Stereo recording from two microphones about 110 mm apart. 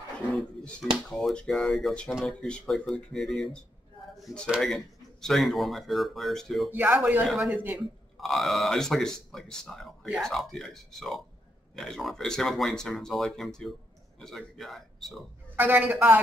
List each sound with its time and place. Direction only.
0.4 s speech: 5° left (ahead or behind)
6.7 s a man's voice: 15° right (ahead or behind)
7.2 s speech: centre (ahead or behind)
7.5 s a man's voice: 15° right (ahead or behind)
8.2 s speech: centre (ahead or behind)
15.5 s a man's voice: 15° right (ahead or behind)